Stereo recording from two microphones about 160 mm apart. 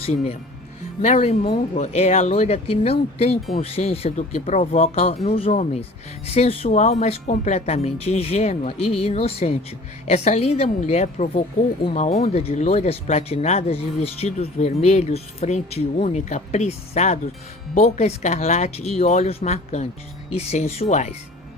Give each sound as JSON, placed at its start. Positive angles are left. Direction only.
{"t": 0.0, "sound": "speech", "side_deg": 40}